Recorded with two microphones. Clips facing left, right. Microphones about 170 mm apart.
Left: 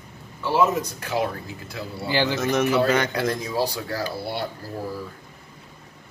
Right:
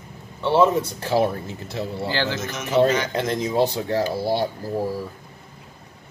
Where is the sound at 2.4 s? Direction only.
60° left (ahead or behind).